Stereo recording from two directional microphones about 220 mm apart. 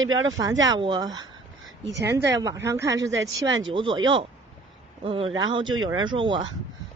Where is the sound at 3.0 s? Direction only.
55° right (ahead or behind).